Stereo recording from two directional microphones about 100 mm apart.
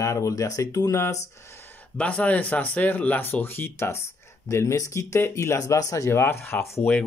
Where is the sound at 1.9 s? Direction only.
15° left (ahead or behind).